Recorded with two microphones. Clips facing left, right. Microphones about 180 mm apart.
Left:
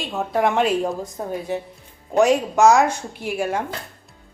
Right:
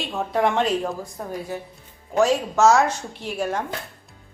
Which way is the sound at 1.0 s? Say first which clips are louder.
Left 4 dB; 20° left (ahead or behind).